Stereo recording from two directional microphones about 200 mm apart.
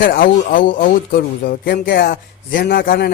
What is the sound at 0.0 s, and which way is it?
Speech, 45° left (ahead or behind).